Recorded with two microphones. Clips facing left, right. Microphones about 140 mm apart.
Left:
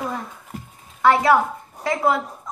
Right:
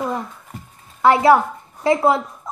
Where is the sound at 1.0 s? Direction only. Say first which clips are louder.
Right 3 dB; 25° right (ahead or behind).